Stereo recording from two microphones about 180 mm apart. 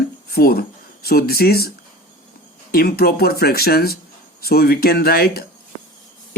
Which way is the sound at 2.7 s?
60° left (ahead or behind).